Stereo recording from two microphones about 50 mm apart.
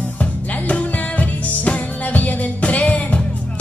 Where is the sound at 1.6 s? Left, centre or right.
Left.